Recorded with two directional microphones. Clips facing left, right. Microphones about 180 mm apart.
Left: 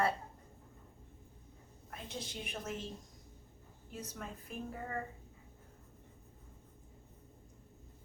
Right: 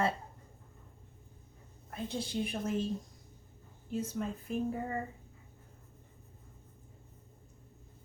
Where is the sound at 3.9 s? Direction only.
25° right (ahead or behind).